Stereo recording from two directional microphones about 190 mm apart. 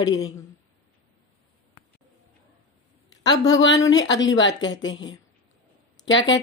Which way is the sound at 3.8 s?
75° left (ahead or behind).